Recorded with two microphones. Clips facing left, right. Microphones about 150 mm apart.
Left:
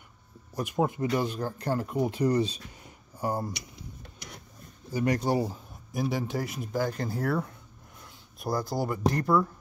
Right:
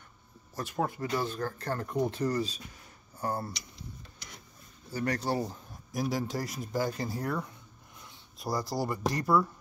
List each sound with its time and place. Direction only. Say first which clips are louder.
0.6 s speech: left 5 dB; 15° left (ahead or behind)
3.5 s a sound: left 2 dB; 60° left (ahead or behind)
4.9 s speech: left 4 dB; 15° left (ahead or behind)
5.9 s speech: left 2 dB; 5° left (ahead or behind)
6.7 s speech: left 2 dB; 5° right (ahead or behind)